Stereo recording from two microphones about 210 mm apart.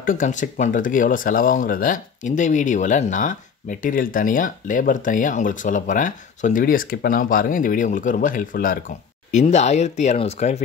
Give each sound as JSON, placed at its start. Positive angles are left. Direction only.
{"t": 0.0, "sound": "speech", "side_deg": 40}